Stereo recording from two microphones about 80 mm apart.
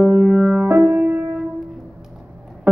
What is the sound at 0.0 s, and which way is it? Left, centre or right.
Music, centre.